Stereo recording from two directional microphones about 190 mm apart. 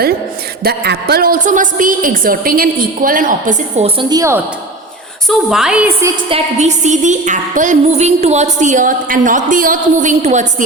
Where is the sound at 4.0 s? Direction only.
20° right (ahead or behind).